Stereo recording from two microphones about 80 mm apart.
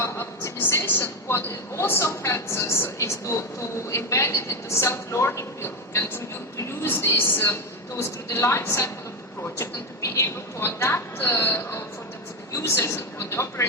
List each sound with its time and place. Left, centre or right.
0.0 s a woman's voice: left
10.2 s a woman's voice: left